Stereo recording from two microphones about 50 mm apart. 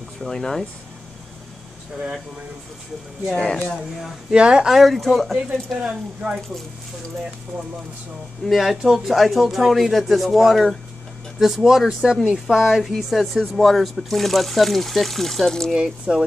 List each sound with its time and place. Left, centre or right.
0.2 s speech: centre
3.3 s speech: centre
4.3 s speech: right
4.6 s speech: centre
5.3 s speech: centre
8.5 s speech: centre
15.7 s speech: centre